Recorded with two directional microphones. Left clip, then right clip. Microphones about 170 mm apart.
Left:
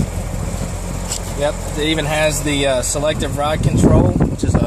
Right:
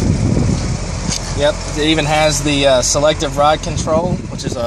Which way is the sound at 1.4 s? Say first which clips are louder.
Right 4 dB; 50° right (ahead or behind).